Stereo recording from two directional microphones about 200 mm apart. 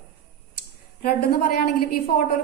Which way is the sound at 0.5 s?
50° left (ahead or behind).